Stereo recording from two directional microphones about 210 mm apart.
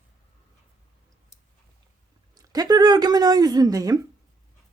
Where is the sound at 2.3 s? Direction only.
15° right (ahead or behind).